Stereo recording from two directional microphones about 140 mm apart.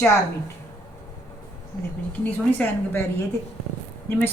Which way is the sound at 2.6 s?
15° left (ahead or behind).